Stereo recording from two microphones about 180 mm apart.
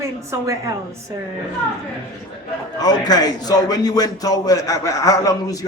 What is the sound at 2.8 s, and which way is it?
A man's voice, 20° left (ahead or behind).